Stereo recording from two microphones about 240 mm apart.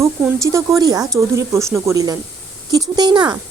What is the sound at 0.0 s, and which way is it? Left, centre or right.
Speech, centre.